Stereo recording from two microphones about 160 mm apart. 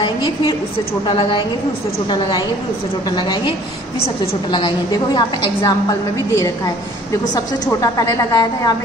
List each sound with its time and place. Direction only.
1.0 s a woman's voice: 30° left (ahead or behind)
3.2 s a woman's voice: 25° left (ahead or behind)